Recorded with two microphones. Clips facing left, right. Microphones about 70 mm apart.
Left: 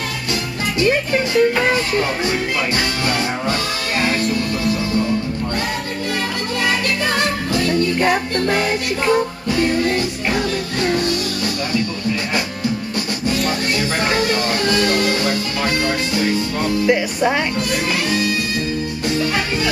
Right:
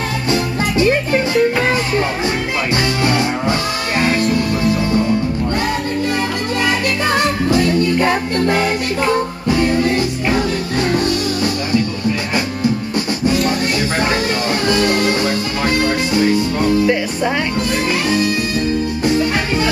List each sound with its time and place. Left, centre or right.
0.8 s music: centre
8.5 s music: centre
14.7 s music: centre
16.8 s music: centre